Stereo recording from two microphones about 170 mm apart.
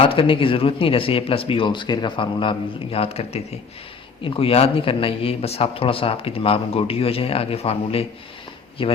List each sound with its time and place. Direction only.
0.0 s a man's voice: 30° left (ahead or behind)